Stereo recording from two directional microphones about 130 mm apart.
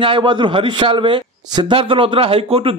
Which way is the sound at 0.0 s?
40° right (ahead or behind).